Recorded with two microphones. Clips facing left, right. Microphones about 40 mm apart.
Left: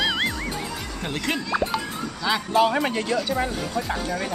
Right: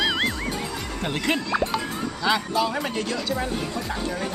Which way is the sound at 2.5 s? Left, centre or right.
Left.